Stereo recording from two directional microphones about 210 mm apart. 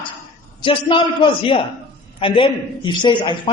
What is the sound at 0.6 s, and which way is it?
A woman's voice, 25° left (ahead or behind).